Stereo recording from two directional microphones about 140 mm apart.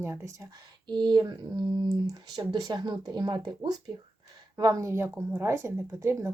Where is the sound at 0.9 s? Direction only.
30° right (ahead or behind).